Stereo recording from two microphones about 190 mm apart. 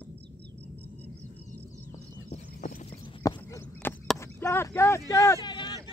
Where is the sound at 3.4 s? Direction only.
10° left (ahead or behind).